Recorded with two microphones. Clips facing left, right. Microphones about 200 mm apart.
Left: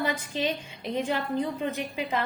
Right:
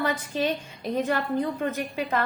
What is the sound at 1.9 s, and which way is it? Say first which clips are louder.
Speech: right 2 dB; 55° right (ahead or behind).